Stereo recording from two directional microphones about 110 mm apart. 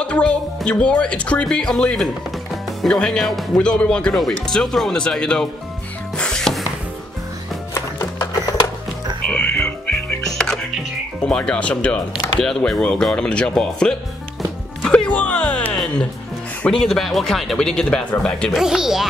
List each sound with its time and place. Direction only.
0.0 s speech: 10° left (ahead or behind)
6.1 s music: 5° left (ahead or behind)
7.7 s music: 30° left (ahead or behind)
9.8 s music: 10° left (ahead or behind)
11.2 s speech: 10° left (ahead or behind)
14.8 s music: 10° left (ahead or behind)
16.6 s speech: 5° left (ahead or behind)